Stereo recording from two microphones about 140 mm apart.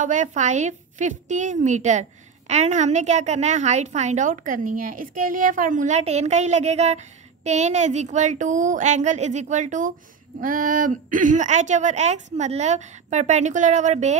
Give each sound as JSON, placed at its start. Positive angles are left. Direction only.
{"t": 0.0, "sound": "a woman's voice", "side_deg": -65}